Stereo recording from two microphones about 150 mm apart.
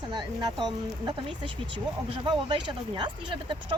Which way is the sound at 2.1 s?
35° right (ahead or behind).